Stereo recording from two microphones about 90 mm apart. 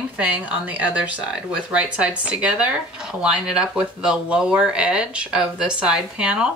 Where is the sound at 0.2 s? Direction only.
15° right (ahead or behind).